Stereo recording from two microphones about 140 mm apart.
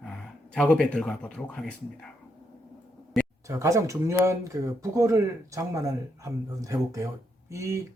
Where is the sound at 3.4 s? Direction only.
20° right (ahead or behind).